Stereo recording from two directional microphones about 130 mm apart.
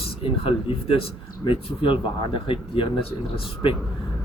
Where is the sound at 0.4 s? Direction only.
45° left (ahead or behind).